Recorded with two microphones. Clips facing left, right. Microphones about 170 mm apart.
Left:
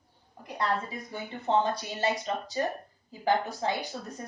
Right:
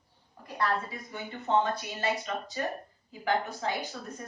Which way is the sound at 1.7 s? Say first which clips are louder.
Left 2 dB; 35° left (ahead or behind).